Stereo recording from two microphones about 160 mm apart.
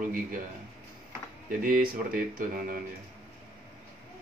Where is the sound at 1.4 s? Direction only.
60° right (ahead or behind).